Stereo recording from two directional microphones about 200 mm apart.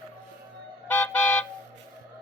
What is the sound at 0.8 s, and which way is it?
Vehicle, 5° left (ahead or behind).